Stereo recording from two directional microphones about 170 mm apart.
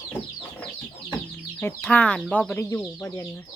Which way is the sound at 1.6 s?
10° left (ahead or behind).